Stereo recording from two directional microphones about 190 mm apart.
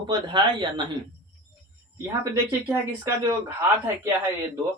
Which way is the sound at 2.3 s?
15° right (ahead or behind).